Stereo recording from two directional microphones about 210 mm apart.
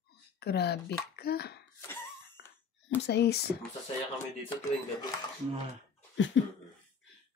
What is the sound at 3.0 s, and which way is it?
Speech, 50° left (ahead or behind).